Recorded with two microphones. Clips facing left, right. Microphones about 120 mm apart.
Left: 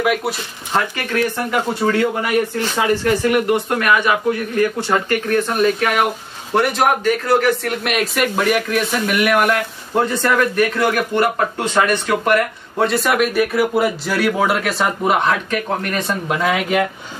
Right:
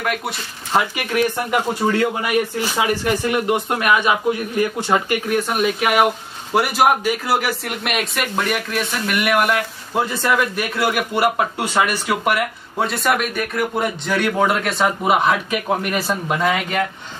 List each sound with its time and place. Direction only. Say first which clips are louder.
0.0 s speech: left 5 dB; 5° left (ahead or behind)
0.7 s speech: even; 15° right (ahead or behind); by 16.8 s centre (ahead or behind)